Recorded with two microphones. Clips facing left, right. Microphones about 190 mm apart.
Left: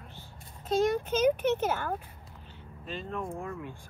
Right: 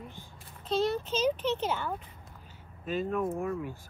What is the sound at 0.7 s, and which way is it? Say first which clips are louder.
Speech: left 2 dB; 45° left (ahead or behind).